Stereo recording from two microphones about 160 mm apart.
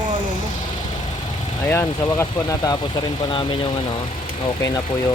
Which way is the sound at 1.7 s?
15° left (ahead or behind).